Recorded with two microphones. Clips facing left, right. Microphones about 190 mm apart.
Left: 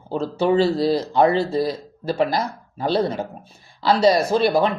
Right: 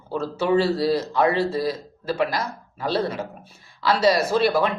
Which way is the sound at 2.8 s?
30° left (ahead or behind).